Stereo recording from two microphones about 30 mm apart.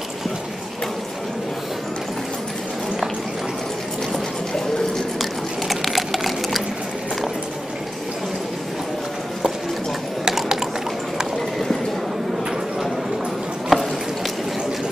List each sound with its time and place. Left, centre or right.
5.2 s sewing machine: centre
10.3 s liquid: centre
13.7 s a sound: centre